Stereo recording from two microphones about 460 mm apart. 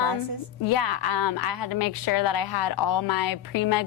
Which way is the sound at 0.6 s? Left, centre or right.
Left.